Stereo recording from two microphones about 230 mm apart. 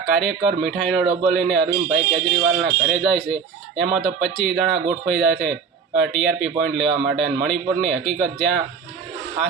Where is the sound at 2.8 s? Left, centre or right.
Centre.